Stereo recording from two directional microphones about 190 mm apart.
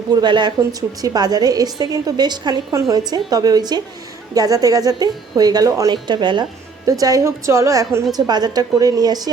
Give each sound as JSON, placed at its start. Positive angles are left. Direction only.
{"t": 0.1, "sound": "a woman's voice", "side_deg": -25}